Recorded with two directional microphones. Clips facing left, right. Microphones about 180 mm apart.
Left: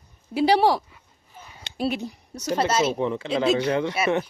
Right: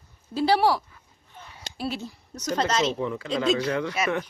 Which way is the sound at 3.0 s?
25° left (ahead or behind).